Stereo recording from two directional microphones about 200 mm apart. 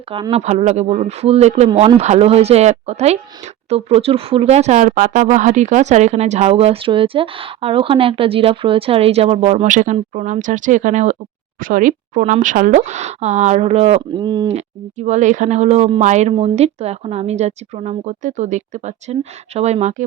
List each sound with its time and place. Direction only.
0.1 s speech: 25° right (ahead or behind)
14.5 s speech: 35° right (ahead or behind)